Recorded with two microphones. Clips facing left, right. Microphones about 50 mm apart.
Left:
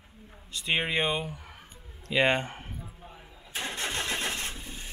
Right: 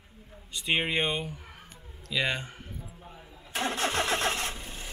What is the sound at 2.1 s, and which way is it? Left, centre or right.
Speech, left.